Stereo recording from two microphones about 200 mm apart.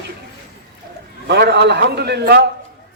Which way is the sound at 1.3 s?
55° right (ahead or behind).